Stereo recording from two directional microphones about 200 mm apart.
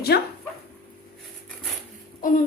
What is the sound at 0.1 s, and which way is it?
Speech, 55° left (ahead or behind).